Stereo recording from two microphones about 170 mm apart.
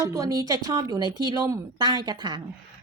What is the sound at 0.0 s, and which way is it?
A woman's voice, 20° right (ahead or behind).